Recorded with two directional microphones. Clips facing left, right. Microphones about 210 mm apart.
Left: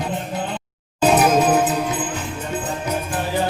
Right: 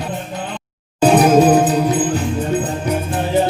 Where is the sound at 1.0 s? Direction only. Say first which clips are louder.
Right 5 dB; 30° right (ahead or behind).